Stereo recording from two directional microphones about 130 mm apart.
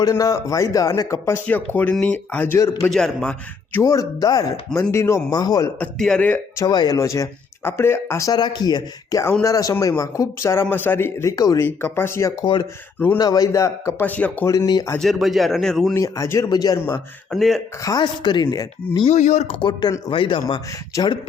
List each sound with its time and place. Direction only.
0.0 s a man's voice: 30° left (ahead or behind); by 3.8 s 10° left (ahead or behind)
3.8 s speech: 30° left (ahead or behind)
5.8 s a man's voice: 5° left (ahead or behind)
6.6 s speech: 30° left (ahead or behind)
8.3 s a man's voice: 35° left (ahead or behind); by 14.4 s 10° left (ahead or behind)
14.4 s speech: 25° left (ahead or behind)
14.9 s a man's voice: centre (ahead or behind)
16.0 s speech: 25° left (ahead or behind)
17.3 s a man's voice: centre (ahead or behind)
17.8 s speech: 35° left (ahead or behind)
19.1 s speech: 65° left (ahead or behind)
19.5 s speech: 35° left (ahead or behind)